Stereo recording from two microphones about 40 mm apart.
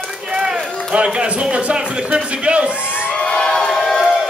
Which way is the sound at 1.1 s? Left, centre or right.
Right.